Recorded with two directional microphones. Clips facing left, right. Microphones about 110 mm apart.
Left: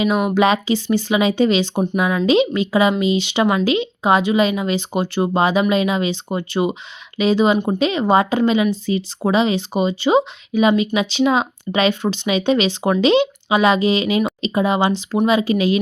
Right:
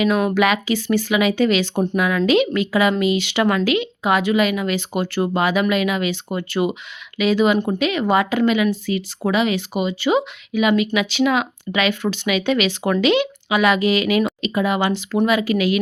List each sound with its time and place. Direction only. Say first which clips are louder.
0.0 s speech: left 1 dB; 15° left (ahead or behind)